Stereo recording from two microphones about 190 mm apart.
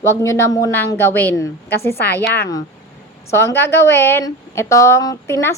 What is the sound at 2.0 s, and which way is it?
Speech, 60° left (ahead or behind).